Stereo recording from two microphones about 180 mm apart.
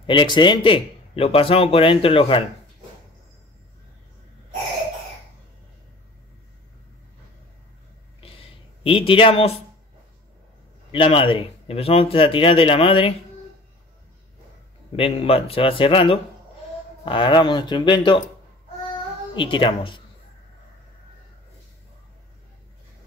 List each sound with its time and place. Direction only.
0.0 s a man's voice: 25° left (ahead or behind)
8.2 s a sound: 30° left (ahead or behind)
10.9 s a man's voice: 30° left (ahead or behind)
15.0 s a man's voice: 30° left (ahead or behind)
19.3 s speech: 30° left (ahead or behind)